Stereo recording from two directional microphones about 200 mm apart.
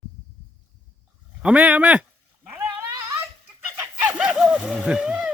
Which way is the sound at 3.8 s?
10° right (ahead or behind).